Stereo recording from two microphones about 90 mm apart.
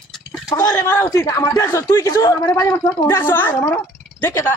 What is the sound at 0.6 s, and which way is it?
A woman's voice, 35° left (ahead or behind).